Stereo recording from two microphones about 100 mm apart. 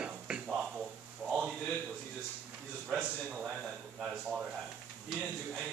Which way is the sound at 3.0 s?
10° right (ahead or behind).